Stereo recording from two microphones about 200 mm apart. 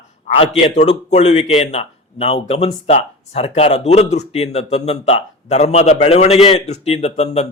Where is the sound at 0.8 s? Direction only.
35° left (ahead or behind).